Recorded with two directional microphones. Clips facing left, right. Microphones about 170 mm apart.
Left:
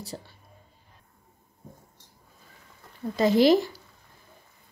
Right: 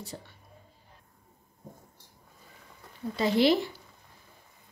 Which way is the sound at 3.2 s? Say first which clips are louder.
Left 5 dB; 45° left (ahead or behind).